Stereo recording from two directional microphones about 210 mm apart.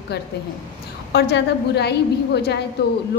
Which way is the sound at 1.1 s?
50° left (ahead or behind).